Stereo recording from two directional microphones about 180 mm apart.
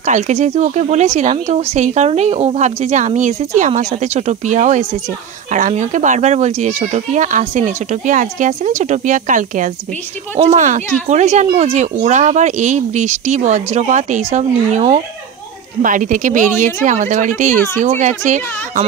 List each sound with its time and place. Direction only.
0.0 s speech: 40° right (ahead or behind)